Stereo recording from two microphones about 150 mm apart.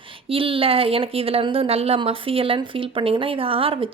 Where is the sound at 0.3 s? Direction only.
35° right (ahead or behind).